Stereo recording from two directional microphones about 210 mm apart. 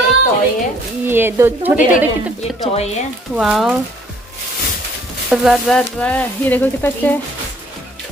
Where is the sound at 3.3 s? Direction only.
5° right (ahead or behind).